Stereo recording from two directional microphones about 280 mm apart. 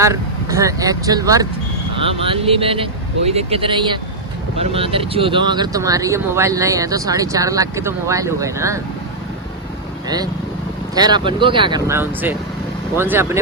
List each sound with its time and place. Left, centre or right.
0.0 s speech: centre
10.9 s speech: centre